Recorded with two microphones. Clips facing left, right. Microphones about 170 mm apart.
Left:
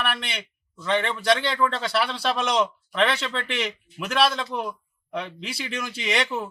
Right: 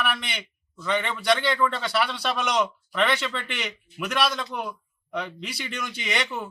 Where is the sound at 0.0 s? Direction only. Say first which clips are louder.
Even; centre (ahead or behind).